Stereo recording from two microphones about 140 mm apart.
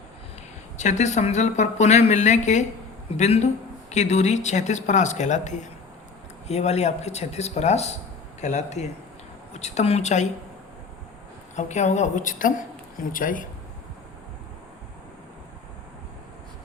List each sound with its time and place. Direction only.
0.8 s speech: 55° left (ahead or behind)
11.5 s speech: 55° left (ahead or behind); by 13.4 s 75° left (ahead or behind)